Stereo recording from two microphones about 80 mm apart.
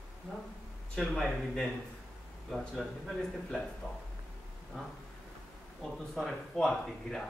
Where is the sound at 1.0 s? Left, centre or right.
Centre.